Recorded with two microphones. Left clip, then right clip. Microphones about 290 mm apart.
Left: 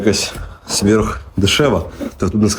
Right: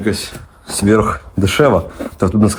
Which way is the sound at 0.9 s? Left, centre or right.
Centre.